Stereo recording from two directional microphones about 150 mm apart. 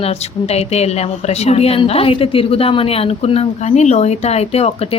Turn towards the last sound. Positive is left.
turn(degrees=45)  # may be behind; listen again after turning